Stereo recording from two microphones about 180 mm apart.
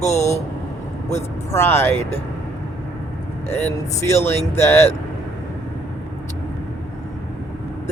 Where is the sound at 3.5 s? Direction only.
15° left (ahead or behind).